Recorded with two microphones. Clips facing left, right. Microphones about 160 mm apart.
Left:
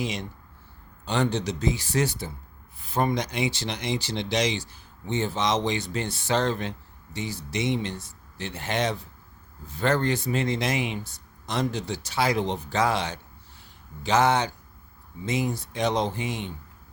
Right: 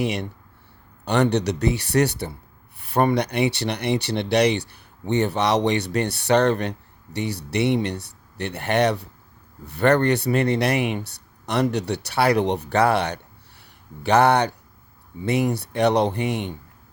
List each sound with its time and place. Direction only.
0.0 s speech: 65° right (ahead or behind)